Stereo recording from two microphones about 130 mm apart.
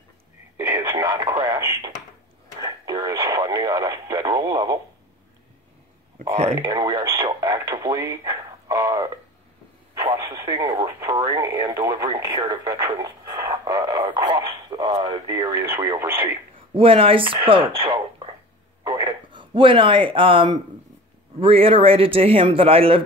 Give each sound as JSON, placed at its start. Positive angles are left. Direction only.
{"t": 0.7, "sound": "radio", "side_deg": -35}
{"t": 6.1, "sound": "a sound", "side_deg": -55}
{"t": 6.6, "sound": "radio", "side_deg": -30}
{"t": 11.3, "sound": "speech", "side_deg": -25}
{"t": 12.6, "sound": "radio", "side_deg": -25}
{"t": 14.0, "sound": "radio", "side_deg": -45}
{"t": 15.0, "sound": "a man's voice", "side_deg": -50}
{"t": 15.3, "sound": "speech", "side_deg": -25}
{"t": 16.7, "sound": "a man's voice", "side_deg": -45}